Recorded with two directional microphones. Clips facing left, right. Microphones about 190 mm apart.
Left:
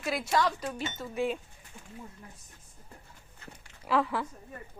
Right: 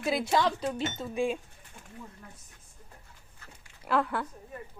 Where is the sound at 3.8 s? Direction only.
Centre (ahead or behind).